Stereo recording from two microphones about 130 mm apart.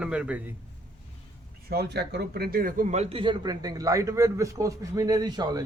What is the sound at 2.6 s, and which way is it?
Speech, 90° right.